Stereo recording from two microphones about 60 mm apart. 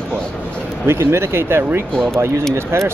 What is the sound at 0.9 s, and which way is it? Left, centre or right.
Speech, right.